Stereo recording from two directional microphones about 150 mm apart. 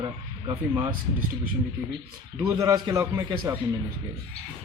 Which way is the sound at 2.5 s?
20° right (ahead or behind).